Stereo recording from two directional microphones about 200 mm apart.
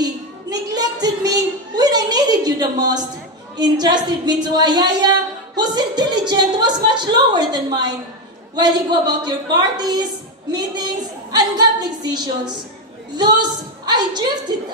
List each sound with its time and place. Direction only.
0.0 s a sound: 20° right (ahead or behind)
3.5 s a woman's voice: 20° right (ahead or behind)
11.3 s a woman's voice: 20° right (ahead or behind)